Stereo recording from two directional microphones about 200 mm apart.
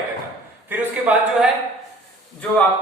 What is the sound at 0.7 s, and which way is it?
Speech, 5° right (ahead or behind).